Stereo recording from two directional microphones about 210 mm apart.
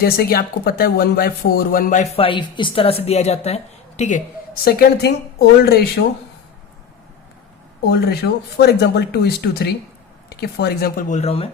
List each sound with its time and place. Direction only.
0.0 s speech: 45° left (ahead or behind)
4.6 s speech: 50° left (ahead or behind)
7.9 s speech: 50° left (ahead or behind); by 11.4 s 30° left (ahead or behind)